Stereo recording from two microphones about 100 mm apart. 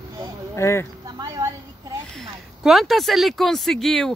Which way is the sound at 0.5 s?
30° left (ahead or behind).